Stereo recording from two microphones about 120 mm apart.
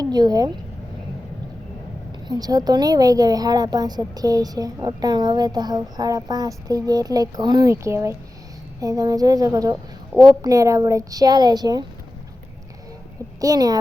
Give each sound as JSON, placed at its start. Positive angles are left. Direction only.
{"t": 0.0, "sound": "speech", "side_deg": -35}
{"t": 2.2, "sound": "speech", "side_deg": -35}
{"t": 13.4, "sound": "speech", "side_deg": -30}